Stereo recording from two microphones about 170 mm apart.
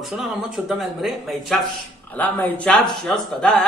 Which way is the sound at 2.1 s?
10° left (ahead or behind).